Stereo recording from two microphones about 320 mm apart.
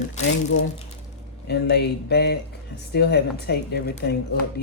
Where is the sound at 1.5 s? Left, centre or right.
Left.